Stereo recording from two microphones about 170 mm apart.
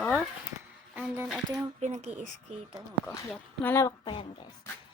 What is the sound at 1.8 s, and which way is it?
Speech, 40° right (ahead or behind).